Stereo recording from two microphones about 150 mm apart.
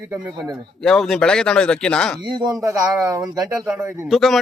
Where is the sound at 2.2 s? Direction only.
30° right (ahead or behind).